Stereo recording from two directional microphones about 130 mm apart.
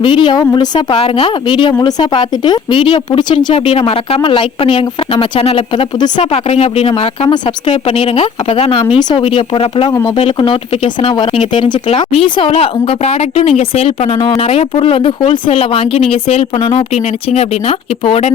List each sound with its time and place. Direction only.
0.0 s a woman's voice: 40° left (ahead or behind)
6.3 s speech: 50° left (ahead or behind); by 9.2 s 35° left (ahead or behind)
9.2 s speech: 45° left (ahead or behind)